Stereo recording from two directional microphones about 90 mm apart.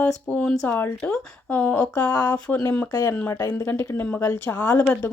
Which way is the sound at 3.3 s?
30° left (ahead or behind).